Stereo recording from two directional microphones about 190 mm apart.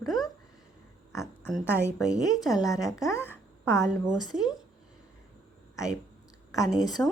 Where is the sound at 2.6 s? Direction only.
15° left (ahead or behind).